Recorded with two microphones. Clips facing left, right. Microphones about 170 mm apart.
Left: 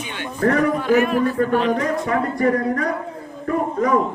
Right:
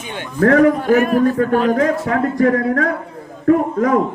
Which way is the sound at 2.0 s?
90° right.